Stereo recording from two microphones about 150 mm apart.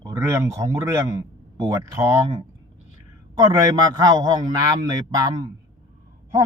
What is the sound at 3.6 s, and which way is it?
A man's voice, 25° right (ahead or behind).